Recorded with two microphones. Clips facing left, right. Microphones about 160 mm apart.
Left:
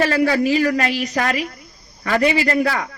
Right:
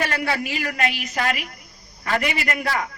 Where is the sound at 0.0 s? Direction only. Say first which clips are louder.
Left 8 dB; 35° left (ahead or behind).